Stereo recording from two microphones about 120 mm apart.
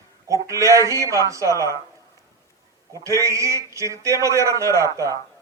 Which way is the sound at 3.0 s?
25° right (ahead or behind).